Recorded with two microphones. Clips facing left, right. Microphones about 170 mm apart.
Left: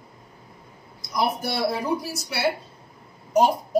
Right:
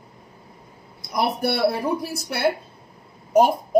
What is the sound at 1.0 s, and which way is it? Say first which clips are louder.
A woman's voice: right 2 dB; 60° right (ahead or behind).